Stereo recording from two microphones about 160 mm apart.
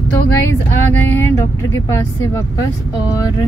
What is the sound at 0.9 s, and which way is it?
Female singing, 10° left (ahead or behind).